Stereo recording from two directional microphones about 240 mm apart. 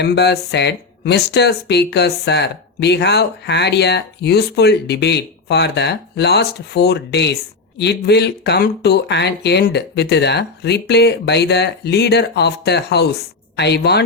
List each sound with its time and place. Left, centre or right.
0.0 s speech: left